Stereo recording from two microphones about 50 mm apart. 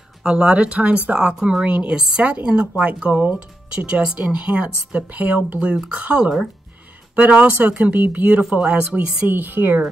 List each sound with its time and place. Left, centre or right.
0.2 s speech: centre
5.2 s speech: right
6.0 s speech: right
8.4 s speech: centre
8.7 s speech: right
9.3 s speech: right